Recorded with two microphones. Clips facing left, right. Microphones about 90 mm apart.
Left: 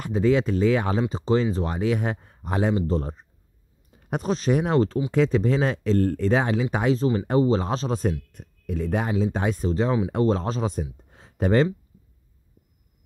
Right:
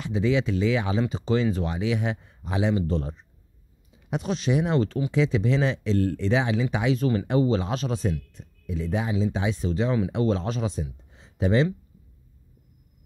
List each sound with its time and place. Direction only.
0.0 s speech: 45° left (ahead or behind)
7.0 s speech: 30° left (ahead or behind)
8.3 s speech: 55° left (ahead or behind)
11.1 s a sound: 50° left (ahead or behind)